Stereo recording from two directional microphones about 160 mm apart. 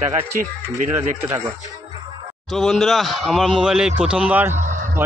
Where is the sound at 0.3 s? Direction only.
60° right (ahead or behind).